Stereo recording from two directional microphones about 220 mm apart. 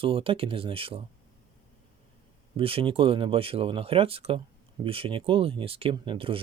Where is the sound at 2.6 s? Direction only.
25° right (ahead or behind).